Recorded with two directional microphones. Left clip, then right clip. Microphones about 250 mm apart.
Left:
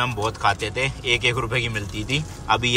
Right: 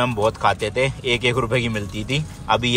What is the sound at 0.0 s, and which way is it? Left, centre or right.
Speech, centre.